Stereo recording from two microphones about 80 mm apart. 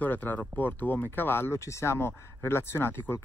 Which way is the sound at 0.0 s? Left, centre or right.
Left.